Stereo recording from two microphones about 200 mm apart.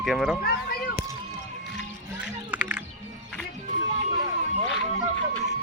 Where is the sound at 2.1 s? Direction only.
5° right (ahead or behind).